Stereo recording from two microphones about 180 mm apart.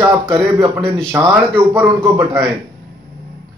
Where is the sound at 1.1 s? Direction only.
15° right (ahead or behind).